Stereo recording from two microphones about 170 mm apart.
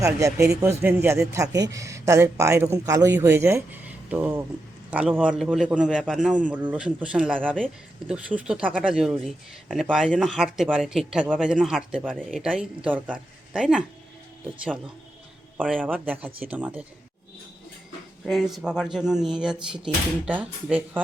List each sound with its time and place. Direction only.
0.0 s speech: 20° right (ahead or behind)
15.6 s speech: centre (ahead or behind)
15.9 s speech: 10° right (ahead or behind)
18.3 s speech: centre (ahead or behind)